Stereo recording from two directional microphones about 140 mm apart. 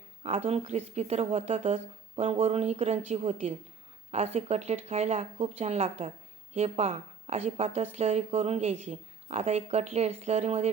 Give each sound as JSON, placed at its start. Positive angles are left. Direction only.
{"t": 0.2, "sound": "a woman's voice", "side_deg": -45}